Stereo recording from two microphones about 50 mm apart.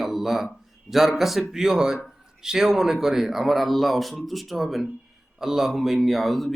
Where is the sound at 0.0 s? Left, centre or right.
Centre.